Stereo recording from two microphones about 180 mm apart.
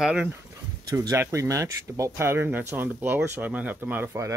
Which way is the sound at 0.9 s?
20° right (ahead or behind).